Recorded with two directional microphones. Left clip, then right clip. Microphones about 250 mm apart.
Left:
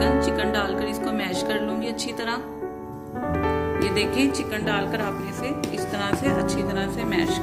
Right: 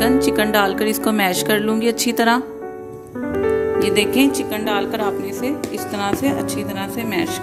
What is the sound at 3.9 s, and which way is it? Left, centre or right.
Speech, right.